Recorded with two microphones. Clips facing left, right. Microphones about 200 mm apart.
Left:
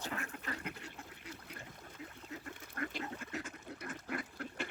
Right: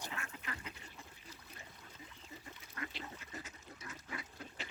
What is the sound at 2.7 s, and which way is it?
Duck, 50° left (ahead or behind).